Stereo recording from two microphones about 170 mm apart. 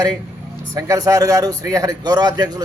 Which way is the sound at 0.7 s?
20° right (ahead or behind).